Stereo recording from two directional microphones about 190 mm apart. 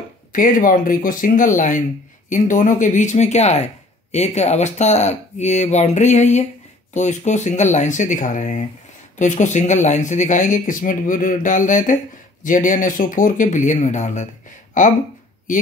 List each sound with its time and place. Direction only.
0.3 s speech: 45° left (ahead or behind)